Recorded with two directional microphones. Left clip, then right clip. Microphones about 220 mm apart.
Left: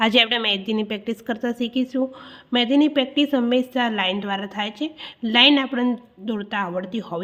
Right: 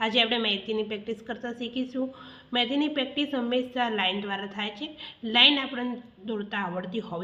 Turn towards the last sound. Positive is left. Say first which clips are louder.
# left 5 dB
turn(degrees=40)  # may be behind; listen again after turning